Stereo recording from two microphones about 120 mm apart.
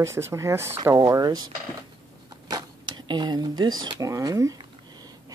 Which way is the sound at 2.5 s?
40° right (ahead or behind).